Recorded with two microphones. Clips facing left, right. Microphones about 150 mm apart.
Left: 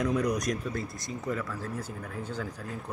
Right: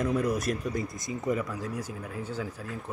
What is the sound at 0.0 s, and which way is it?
Speech, 5° right (ahead or behind).